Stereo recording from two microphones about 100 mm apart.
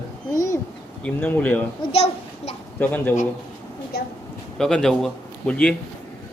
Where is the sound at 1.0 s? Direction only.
15° left (ahead or behind).